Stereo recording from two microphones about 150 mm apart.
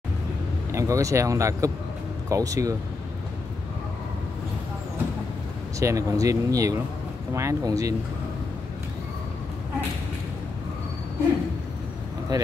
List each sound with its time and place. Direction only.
0.7 s speech: 20° right (ahead or behind)
5.8 s speech: 20° right (ahead or behind)
12.3 s speech: 25° right (ahead or behind)